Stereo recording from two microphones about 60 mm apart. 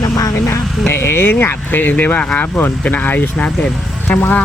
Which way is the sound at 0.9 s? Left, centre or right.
Left.